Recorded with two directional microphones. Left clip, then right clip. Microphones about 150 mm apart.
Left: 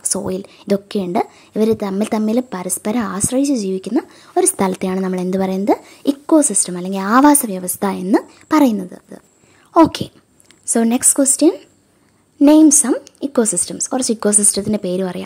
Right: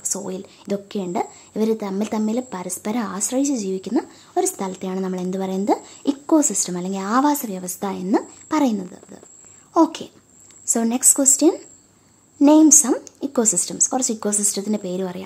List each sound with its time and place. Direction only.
0.0 s a woman's voice: 35° left (ahead or behind)
4.6 s a woman's voice: 50° left (ahead or behind); by 5.6 s 35° left (ahead or behind)
5.7 s a woman's voice: 25° left (ahead or behind)